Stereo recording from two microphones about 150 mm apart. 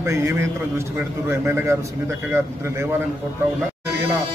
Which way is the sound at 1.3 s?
15° right (ahead or behind).